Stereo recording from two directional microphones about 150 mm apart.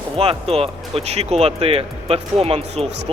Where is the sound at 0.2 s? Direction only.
40° right (ahead or behind).